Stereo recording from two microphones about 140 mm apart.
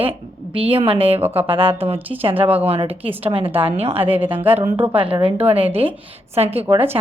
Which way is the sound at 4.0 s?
15° right (ahead or behind).